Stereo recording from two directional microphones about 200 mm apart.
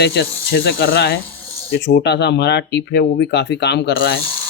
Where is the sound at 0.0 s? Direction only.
55° left (ahead or behind).